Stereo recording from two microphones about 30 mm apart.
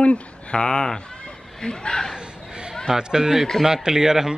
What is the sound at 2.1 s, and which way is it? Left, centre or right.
Chatter, right.